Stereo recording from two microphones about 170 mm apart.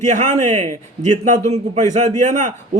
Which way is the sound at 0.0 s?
45° right (ahead or behind).